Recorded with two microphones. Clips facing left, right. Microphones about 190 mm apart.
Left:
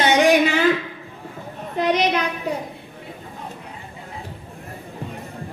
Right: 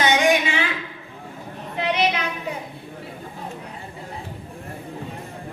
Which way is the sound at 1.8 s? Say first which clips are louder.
Left 3 dB; 40° left (ahead or behind).